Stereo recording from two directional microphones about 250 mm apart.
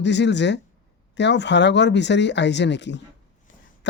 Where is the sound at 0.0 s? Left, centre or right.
Left.